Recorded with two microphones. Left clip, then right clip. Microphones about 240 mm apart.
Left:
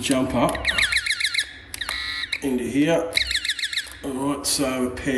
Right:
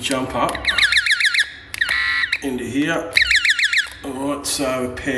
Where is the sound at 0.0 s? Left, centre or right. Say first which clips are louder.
Right 1 dB; centre.